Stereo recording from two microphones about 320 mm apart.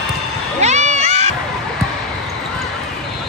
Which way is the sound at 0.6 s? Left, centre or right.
Right.